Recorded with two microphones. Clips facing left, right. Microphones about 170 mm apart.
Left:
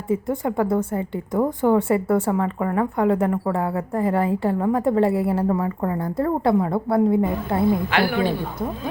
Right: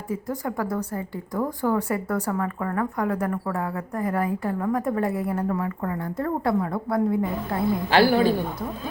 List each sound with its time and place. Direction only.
0.1 s a woman's voice: 25° left (ahead or behind)
7.9 s a woman's voice: 35° right (ahead or behind)